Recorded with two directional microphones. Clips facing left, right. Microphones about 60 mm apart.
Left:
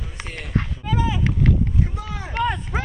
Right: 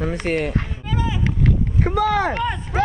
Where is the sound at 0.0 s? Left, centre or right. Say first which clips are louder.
Right 13 dB; right.